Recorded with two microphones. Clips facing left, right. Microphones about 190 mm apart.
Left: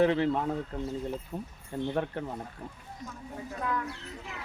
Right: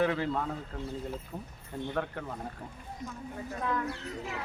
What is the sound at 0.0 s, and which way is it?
A man's voice, 25° left (ahead or behind).